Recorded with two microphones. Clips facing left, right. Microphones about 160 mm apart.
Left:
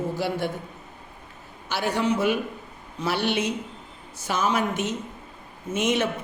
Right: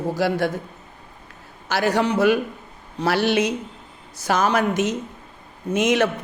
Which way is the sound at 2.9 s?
90° right.